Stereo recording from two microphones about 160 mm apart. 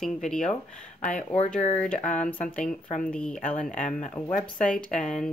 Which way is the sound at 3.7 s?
50° left (ahead or behind).